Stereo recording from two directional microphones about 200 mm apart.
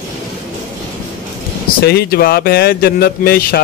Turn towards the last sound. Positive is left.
turn(degrees=50)  # may be behind; listen again after turning